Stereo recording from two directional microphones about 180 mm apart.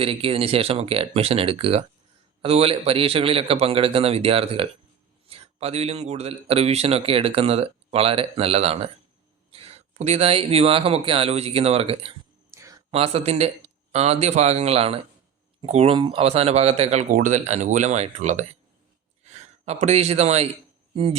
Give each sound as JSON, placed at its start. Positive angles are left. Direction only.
{"t": 0.0, "sound": "speech", "side_deg": -30}
{"t": 12.5, "sound": "a sound", "side_deg": -15}
{"t": 12.9, "sound": "speech", "side_deg": -35}